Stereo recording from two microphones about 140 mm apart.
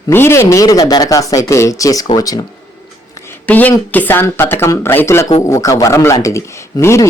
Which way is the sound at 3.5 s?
10° left (ahead or behind).